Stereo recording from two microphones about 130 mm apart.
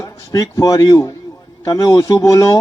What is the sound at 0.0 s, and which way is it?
A man's voice, 25° left (ahead or behind).